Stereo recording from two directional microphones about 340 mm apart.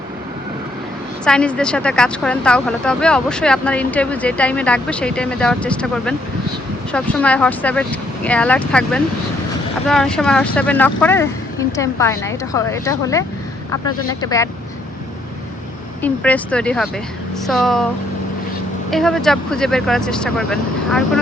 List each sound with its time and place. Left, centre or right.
1.2 s a woman's voice: centre
16.0 s speech: centre
18.9 s speech: centre